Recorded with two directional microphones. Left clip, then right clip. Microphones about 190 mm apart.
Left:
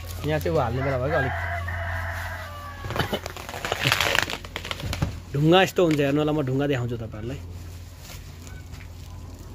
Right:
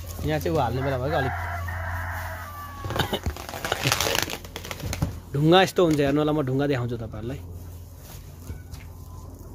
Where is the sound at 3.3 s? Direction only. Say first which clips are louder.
Even; 55° right (ahead or behind).